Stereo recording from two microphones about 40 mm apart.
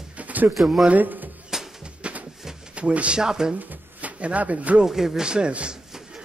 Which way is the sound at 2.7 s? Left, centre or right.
Right.